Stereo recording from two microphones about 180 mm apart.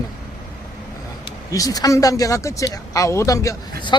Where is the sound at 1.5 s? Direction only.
20° left (ahead or behind).